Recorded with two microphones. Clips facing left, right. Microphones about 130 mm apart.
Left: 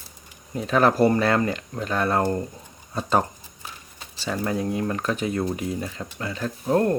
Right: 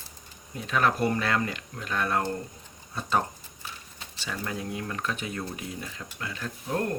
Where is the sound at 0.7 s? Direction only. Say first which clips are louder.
Left 7 dB; 35° left (ahead or behind).